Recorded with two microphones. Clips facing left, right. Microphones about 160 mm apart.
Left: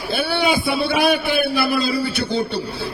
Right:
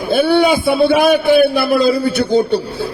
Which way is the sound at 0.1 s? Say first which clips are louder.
Right 8 dB; 50° right (ahead or behind).